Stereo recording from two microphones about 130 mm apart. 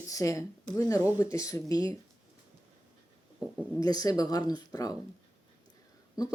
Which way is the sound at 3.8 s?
30° left (ahead or behind).